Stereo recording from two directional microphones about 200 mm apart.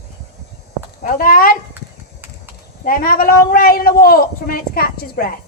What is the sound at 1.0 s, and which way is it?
Speech, 45° left (ahead or behind).